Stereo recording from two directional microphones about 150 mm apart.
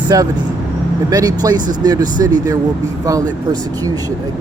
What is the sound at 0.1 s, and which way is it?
Speech, 25° right (ahead or behind).